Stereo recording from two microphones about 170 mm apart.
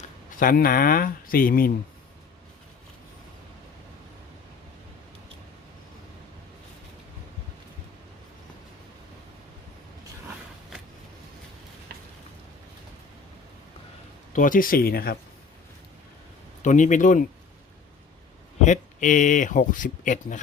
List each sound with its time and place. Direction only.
0.3 s speech: 55° left (ahead or behind)
14.3 s speech: 50° left (ahead or behind)
16.6 s speech: 45° left (ahead or behind)
18.6 s speech: 45° left (ahead or behind)